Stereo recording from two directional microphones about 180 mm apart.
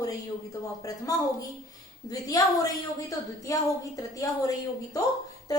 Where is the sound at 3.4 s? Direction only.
20° left (ahead or behind).